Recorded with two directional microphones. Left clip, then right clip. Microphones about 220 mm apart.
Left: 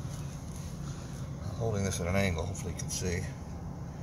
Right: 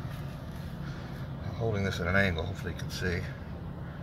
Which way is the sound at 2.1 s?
10° right (ahead or behind).